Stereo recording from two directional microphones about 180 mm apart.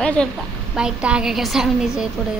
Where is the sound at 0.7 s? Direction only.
5° right (ahead or behind).